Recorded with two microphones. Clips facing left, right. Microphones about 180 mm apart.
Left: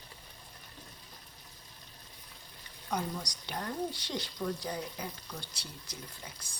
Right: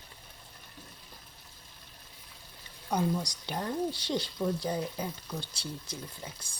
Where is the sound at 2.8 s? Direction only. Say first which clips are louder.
Right 6 dB; 25° right (ahead or behind).